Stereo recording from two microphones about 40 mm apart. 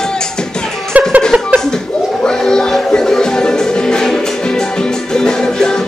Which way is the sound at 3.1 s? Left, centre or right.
Centre.